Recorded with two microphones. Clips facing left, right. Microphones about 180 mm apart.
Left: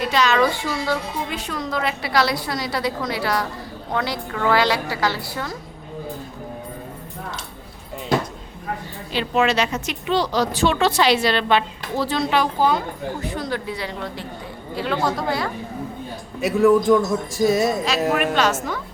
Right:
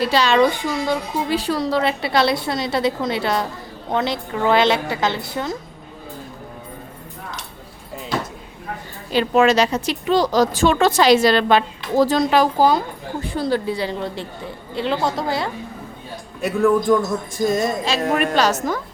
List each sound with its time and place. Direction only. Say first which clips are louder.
0.0 s speech: right 3 dB; 30° right (ahead or behind)
0.5 s speech: right 2 dB; 20° right (ahead or behind)
1.3 s a woman's voice: right 7 dB; 35° right (ahead or behind)
9.1 s a woman's voice: right 5 dB; 45° right (ahead or behind); by 15.4 s 25° right (ahead or behind)
16.4 s a man's voice: left 2 dB; centre (ahead or behind)
18.3 s speech: right 2 dB; 40° right (ahead or behind)